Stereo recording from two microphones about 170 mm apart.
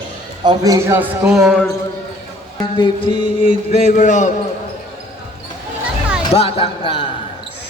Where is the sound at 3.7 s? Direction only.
45° left (ahead or behind).